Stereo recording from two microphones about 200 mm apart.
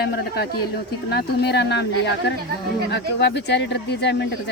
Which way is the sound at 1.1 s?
55° left (ahead or behind).